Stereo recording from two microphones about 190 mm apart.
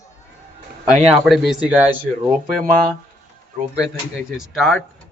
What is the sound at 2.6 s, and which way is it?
Speech, 45° right (ahead or behind).